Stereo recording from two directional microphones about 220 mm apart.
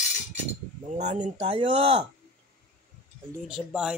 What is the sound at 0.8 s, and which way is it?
Speech, 30° right (ahead or behind).